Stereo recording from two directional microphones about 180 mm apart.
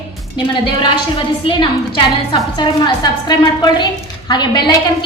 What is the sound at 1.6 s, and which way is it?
A woman's voice, 25° left (ahead or behind).